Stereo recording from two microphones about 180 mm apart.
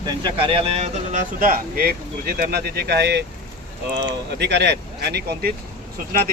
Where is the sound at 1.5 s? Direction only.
55° right (ahead or behind).